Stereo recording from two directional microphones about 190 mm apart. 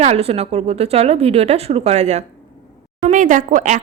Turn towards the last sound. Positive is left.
turn(degrees=-40)  # may be behind; listen again after turning